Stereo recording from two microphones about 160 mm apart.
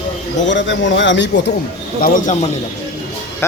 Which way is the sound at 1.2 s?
90° left.